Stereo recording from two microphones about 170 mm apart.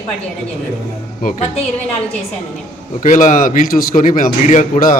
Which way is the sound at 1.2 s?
55° left (ahead or behind).